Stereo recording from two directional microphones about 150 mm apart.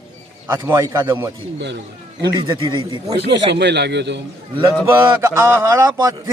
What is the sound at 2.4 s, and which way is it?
Speech, 30° right (ahead or behind).